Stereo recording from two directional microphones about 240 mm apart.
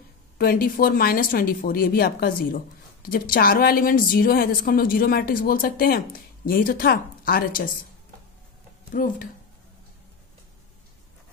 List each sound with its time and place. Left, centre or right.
0.4 s speech: left
8.9 s speech: left